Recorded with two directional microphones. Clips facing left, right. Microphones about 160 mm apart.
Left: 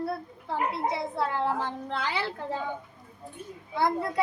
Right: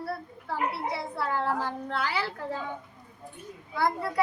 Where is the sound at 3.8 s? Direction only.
20° left (ahead or behind).